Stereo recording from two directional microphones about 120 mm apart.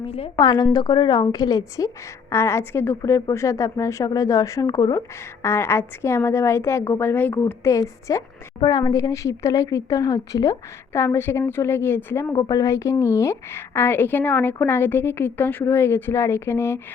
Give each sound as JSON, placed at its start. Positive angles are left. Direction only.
{"t": 0.0, "sound": "a woman's voice", "side_deg": 55}
{"t": 0.3, "sound": "a woman's voice", "side_deg": 35}
{"t": 12.4, "sound": "a woman's voice", "side_deg": 30}